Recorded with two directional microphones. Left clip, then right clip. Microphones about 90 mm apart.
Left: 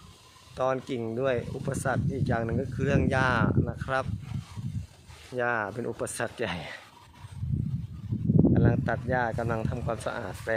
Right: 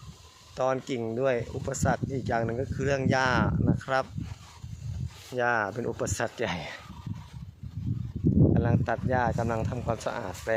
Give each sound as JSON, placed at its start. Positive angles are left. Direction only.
{"t": 0.5, "sound": "speech", "side_deg": -20}
{"t": 5.3, "sound": "speech", "side_deg": -25}
{"t": 8.5, "sound": "speech", "side_deg": -15}